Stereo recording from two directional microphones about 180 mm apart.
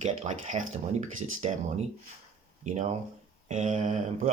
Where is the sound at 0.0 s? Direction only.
40° right (ahead or behind).